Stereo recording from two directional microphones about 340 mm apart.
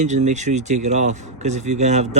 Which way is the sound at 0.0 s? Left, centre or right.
Centre.